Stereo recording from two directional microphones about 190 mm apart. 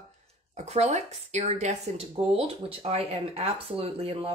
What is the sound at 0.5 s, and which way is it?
Speech, 35° right (ahead or behind).